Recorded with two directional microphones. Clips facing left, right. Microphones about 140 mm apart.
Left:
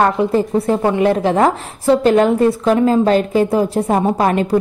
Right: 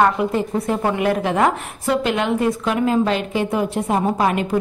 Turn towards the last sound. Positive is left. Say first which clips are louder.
# left 4 dB
turn(degrees=35)  # may be behind; listen again after turning